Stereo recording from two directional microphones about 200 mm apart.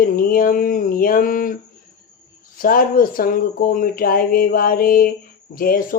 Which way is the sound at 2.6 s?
45° left (ahead or behind).